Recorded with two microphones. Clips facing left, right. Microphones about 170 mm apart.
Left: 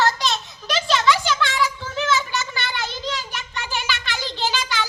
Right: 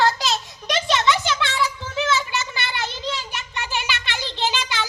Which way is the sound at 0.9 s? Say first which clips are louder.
Left 1 dB; 25° right (ahead or behind).